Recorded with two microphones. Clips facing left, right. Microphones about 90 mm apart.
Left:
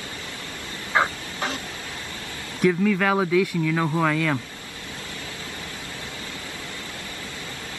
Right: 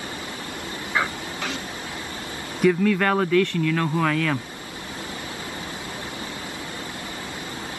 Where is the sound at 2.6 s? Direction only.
Centre (ahead or behind).